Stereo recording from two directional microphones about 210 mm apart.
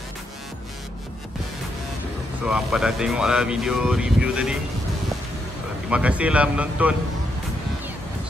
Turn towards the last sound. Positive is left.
turn(degrees=-5)  # may be behind; listen again after turning